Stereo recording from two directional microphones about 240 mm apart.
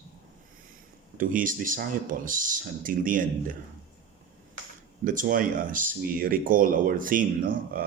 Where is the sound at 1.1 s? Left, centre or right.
Right.